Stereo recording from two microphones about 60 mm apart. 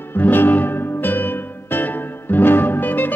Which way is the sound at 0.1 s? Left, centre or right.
Left.